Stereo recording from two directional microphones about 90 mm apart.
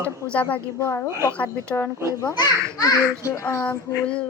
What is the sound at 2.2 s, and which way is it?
Speech, 45° left (ahead or behind).